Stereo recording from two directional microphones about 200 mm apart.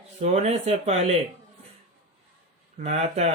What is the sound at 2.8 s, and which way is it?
Speech, 35° right (ahead or behind).